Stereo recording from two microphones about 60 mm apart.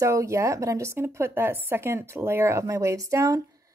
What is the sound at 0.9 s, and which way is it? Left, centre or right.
Speech, right.